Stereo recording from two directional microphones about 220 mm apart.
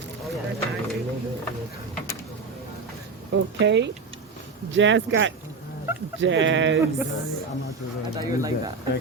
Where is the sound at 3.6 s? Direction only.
55° right (ahead or behind).